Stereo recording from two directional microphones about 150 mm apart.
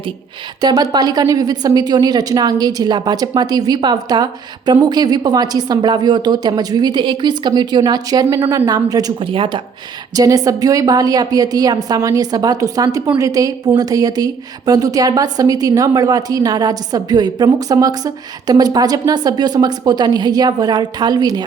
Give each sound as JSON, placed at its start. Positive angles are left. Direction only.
{"t": 0.6, "sound": "a woman's voice", "side_deg": -25}
{"t": 10.2, "sound": "a woman's voice", "side_deg": -25}